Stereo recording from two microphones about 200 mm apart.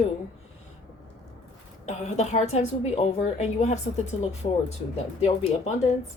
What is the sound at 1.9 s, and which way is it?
A woman's voice, 35° left (ahead or behind).